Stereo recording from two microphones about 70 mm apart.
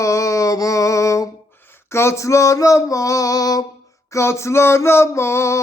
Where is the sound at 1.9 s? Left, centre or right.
Left.